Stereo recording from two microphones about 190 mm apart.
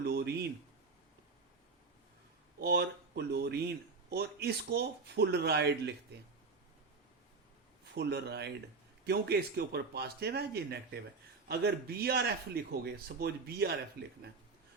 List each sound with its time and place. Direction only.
0.0 s a sound: 60° right (ahead or behind)
2.6 s a man's voice: 60° right (ahead or behind)
7.9 s a man's voice: 60° right (ahead or behind)